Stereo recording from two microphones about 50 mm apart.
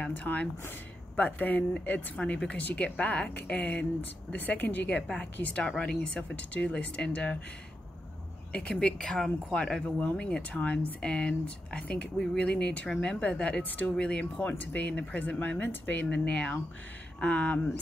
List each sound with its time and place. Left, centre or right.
0.1 s a woman's voice: left
4.0 s a woman's voice: left
5.0 s speech: centre
8.5 s speech: left
8.7 s a woman's voice: centre